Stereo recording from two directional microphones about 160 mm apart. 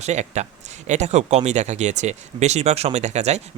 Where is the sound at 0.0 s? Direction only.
45° right (ahead or behind).